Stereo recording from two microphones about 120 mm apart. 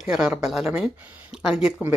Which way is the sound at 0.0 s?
5° right (ahead or behind).